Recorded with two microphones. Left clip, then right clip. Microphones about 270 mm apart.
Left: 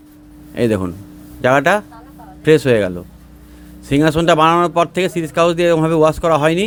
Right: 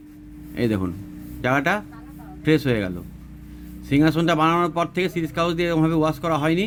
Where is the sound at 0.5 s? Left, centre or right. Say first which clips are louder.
Left 7 dB; centre.